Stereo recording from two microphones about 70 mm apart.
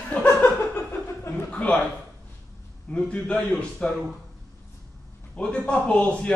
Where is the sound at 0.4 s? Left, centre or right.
Left.